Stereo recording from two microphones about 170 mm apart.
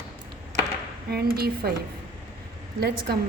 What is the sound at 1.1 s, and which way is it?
Speech, 70° right (ahead or behind).